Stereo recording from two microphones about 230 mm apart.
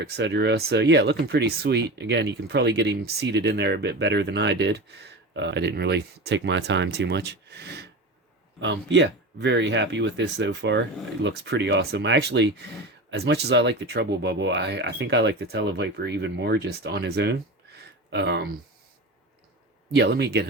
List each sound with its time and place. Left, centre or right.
0.0 s speech: right
19.9 s speech: right